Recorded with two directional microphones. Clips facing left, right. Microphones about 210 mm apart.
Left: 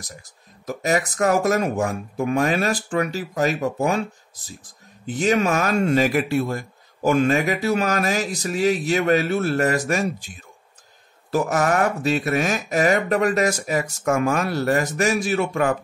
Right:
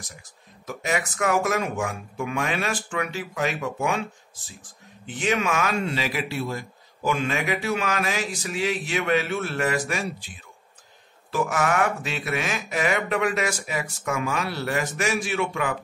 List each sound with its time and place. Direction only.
0.7 s speech: 40° left (ahead or behind)